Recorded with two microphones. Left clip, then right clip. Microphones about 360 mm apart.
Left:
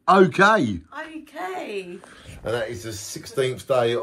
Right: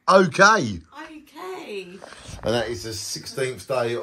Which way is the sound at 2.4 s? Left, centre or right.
Centre.